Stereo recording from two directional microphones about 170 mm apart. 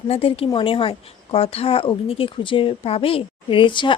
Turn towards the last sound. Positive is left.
turn(degrees=30)  # may be behind; listen again after turning